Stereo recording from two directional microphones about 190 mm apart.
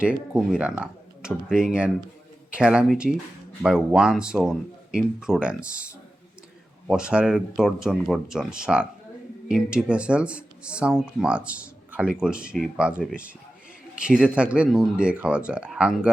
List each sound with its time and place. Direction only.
0.0 s speech: 5° right (ahead or behind)